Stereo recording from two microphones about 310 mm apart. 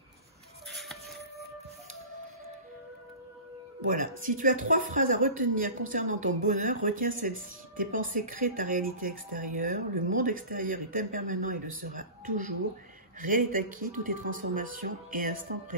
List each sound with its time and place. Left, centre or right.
3.8 s speech: right